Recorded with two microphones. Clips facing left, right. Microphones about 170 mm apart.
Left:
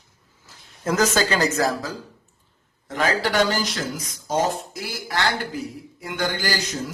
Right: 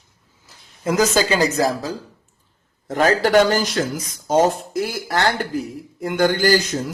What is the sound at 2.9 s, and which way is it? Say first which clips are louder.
Speech: right 7 dB; 50° right (ahead or behind).